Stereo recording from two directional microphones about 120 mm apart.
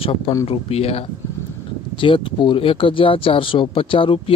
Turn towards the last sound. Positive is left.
turn(degrees=45)  # may be behind; listen again after turning